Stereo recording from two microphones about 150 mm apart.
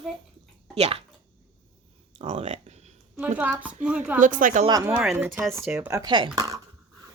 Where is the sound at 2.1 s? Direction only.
45° right (ahead or behind).